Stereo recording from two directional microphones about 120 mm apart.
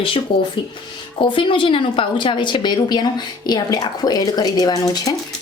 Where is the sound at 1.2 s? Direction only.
45° left (ahead or behind).